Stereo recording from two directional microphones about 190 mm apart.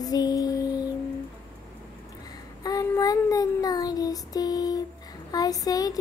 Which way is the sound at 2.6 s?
20° left (ahead or behind).